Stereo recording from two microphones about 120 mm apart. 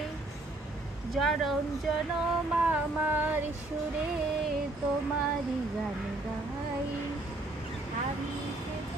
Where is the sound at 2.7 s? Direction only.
15° right (ahead or behind).